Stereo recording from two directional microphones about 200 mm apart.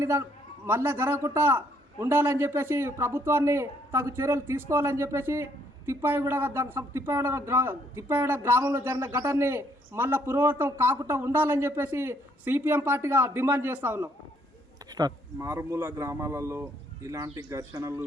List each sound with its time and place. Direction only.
0.0 s a man's voice: 15° right (ahead or behind)